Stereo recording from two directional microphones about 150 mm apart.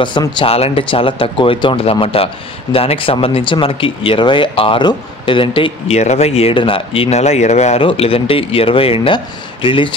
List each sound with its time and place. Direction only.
0.0 s speech: 30° left (ahead or behind)